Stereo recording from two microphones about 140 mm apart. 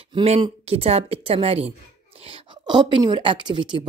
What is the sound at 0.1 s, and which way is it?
Speech, 40° right (ahead or behind).